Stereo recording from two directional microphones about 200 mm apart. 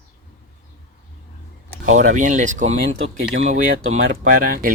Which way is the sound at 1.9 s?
40° right (ahead or behind).